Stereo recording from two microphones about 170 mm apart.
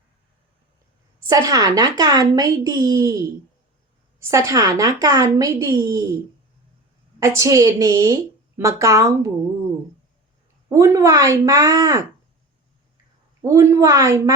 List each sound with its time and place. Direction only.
1.3 s a woman's voice: 20° right (ahead or behind)
7.2 s a woman's voice: 15° right (ahead or behind)
10.7 s a woman's voice: 15° right (ahead or behind)
13.4 s a woman's voice: 15° right (ahead or behind)